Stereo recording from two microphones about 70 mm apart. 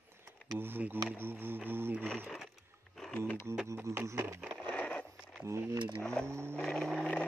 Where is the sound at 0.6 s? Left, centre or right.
Right.